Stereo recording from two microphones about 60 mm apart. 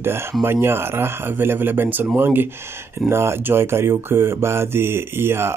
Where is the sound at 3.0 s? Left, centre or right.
Right.